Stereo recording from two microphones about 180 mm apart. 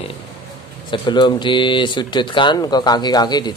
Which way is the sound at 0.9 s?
25° left (ahead or behind).